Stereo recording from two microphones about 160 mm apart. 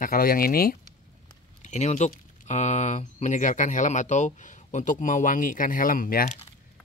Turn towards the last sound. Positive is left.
turn(degrees=65)  # may be behind; listen again after turning